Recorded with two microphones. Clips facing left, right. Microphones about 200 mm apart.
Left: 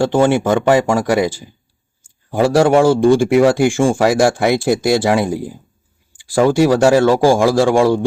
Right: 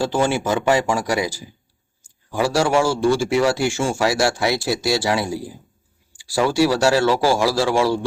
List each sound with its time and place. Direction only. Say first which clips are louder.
0.0 s speech: left 6 dB; 55° left (ahead or behind)
2.3 s speech: left 6 dB; 55° left (ahead or behind)